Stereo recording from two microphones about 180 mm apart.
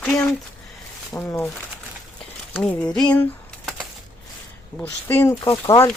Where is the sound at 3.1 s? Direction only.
10° left (ahead or behind).